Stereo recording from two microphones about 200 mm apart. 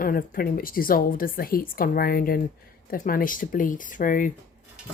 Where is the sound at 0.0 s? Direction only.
45° left (ahead or behind).